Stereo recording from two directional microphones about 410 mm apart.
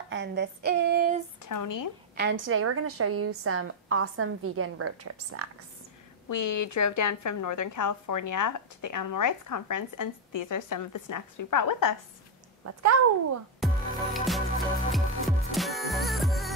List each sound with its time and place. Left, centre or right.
0.1 s a sound: right
1.4 s speech: left
2.3 s a woman's voice: right
6.2 s a woman's voice: left
12.6 s a woman's voice: right
13.6 s music: centre